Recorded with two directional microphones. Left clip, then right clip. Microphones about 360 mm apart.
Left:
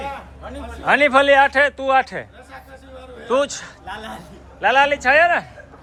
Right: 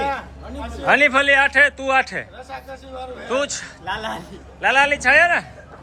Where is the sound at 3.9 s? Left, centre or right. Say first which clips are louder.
Right 6 dB; centre.